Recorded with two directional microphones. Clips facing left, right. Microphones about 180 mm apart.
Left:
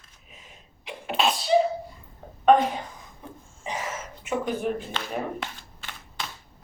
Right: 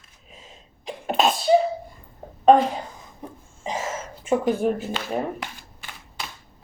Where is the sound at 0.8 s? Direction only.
45° right (ahead or behind).